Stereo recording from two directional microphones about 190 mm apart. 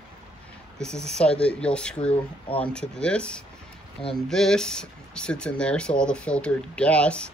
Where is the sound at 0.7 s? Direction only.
5° left (ahead or behind).